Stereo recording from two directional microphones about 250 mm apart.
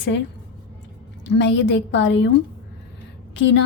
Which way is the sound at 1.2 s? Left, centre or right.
Left.